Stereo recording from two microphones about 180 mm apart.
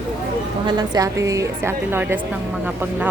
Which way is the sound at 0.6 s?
20° right (ahead or behind).